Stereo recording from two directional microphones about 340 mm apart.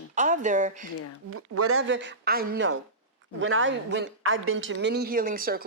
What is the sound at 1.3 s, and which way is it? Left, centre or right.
A woman's voice, right.